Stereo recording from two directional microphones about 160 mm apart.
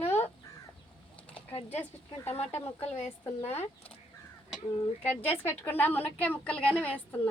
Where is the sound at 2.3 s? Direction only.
40° left (ahead or behind).